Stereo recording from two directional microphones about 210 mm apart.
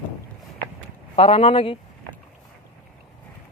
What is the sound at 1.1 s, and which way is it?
Speech, 30° left (ahead or behind).